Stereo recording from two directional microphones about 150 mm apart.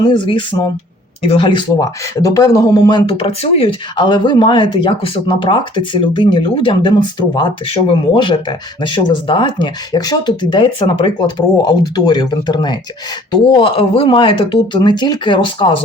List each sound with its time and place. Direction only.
0.0 s speech: 30° left (ahead or behind)